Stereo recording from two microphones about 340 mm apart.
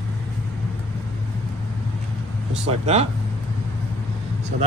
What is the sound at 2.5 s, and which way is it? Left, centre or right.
Speech, centre.